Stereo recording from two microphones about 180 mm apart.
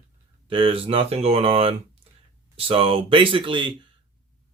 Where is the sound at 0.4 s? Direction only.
30° right (ahead or behind).